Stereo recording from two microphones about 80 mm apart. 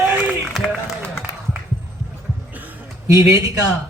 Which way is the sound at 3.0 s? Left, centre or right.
Right.